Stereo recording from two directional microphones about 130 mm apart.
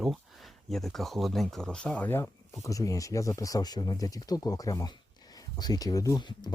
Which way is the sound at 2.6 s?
25° left (ahead or behind).